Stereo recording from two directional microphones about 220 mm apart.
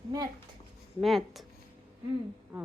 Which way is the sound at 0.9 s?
Centre (ahead or behind).